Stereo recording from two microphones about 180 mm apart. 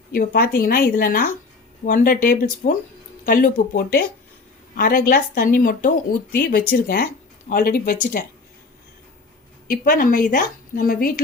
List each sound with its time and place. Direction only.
0.1 s a woman's voice: 55° left (ahead or behind)
9.6 s a woman's voice: 50° left (ahead or behind)